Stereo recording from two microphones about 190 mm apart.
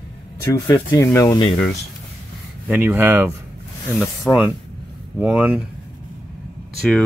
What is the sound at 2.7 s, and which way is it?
Speech, 10° right (ahead or behind).